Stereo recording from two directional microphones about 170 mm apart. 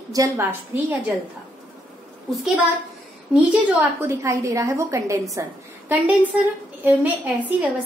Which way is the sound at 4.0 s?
15° right (ahead or behind).